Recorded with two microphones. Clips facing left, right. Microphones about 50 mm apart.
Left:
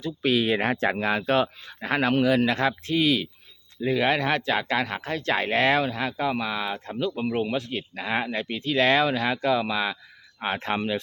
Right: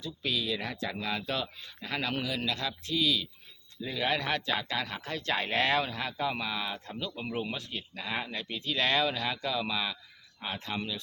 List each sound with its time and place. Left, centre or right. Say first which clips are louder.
0.0 s speech: left 10 dB; left
1.0 s speech: left 10 dB; left
4.1 s speech: left 7 dB; centre
4.5 s speech: left 7 dB; left
5.1 s speech: left 6 dB; centre